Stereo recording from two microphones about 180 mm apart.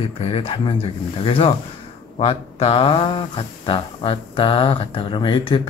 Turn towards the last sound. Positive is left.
turn(degrees=30)  # may be behind; listen again after turning